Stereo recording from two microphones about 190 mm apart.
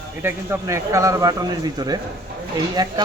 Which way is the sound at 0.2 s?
15° right (ahead or behind).